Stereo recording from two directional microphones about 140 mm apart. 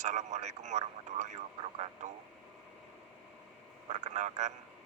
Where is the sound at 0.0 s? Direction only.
55° right (ahead or behind).